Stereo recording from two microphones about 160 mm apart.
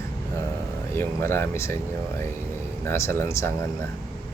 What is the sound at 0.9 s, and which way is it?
Speech, 15° left (ahead or behind).